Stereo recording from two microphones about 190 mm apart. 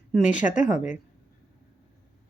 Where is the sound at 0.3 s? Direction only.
40° left (ahead or behind).